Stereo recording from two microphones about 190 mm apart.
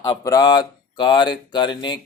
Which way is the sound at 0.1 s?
20° left (ahead or behind).